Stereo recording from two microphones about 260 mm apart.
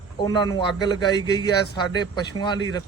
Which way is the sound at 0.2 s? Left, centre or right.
Centre.